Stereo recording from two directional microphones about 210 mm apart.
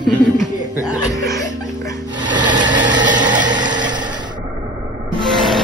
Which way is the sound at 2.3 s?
20° right (ahead or behind).